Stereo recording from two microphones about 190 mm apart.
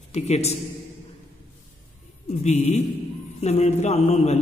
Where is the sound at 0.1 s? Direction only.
35° left (ahead or behind).